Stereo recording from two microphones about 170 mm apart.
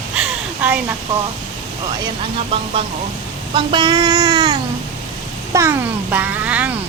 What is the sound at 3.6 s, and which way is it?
Child singing, 25° right (ahead or behind).